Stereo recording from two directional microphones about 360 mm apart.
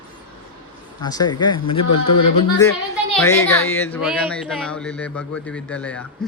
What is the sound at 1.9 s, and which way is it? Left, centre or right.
Speech, left.